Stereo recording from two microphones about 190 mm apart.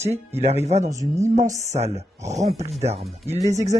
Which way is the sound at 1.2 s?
40° right (ahead or behind).